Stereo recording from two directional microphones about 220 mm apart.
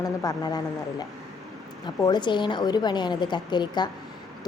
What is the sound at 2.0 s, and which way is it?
A woman's voice, 20° left (ahead or behind).